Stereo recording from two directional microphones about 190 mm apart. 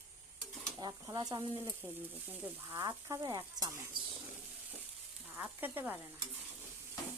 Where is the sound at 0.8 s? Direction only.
20° right (ahead or behind).